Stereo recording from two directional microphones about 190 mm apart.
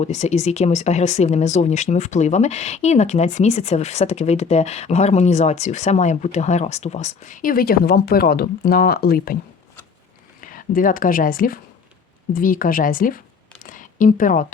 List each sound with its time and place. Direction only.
0.0 s speech: 35° left (ahead or behind); by 9.4 s 50° left (ahead or behind)
10.4 s speech: 45° left (ahead or behind)